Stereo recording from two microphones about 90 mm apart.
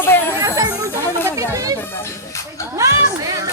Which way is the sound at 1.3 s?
40° right (ahead or behind).